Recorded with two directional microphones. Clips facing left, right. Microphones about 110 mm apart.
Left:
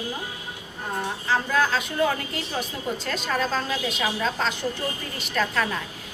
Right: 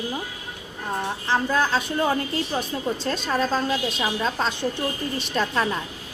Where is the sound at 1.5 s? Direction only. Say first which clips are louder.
Right 1 dB; 30° right (ahead or behind).